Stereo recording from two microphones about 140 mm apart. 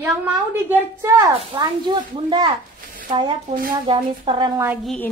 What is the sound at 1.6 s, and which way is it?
Speech, 30° right (ahead or behind).